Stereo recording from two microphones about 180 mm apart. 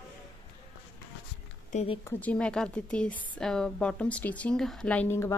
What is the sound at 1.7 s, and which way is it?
Speech, 40° left (ahead or behind).